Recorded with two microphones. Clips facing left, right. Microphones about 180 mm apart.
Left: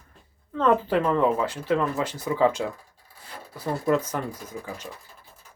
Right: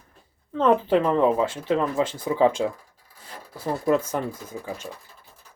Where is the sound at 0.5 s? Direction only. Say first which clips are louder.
Right 2 dB; 20° right (ahead or behind).